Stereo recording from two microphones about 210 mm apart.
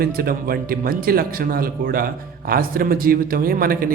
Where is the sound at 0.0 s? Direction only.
45° right (ahead or behind).